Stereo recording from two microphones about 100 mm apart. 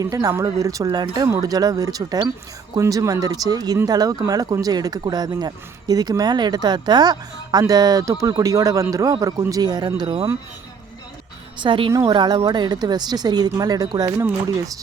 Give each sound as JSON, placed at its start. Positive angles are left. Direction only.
{"t": 0.0, "sound": "speech", "side_deg": -35}
{"t": 11.6, "sound": "a woman's voice", "side_deg": -55}